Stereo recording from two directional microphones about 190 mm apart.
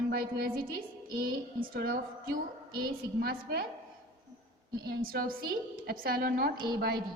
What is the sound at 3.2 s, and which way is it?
Speech, 55° right (ahead or behind).